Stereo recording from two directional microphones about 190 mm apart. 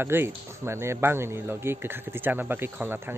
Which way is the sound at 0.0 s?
10° right (ahead or behind).